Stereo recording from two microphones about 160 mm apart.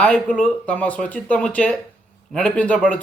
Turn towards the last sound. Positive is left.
turn(degrees=10)  # may be behind; listen again after turning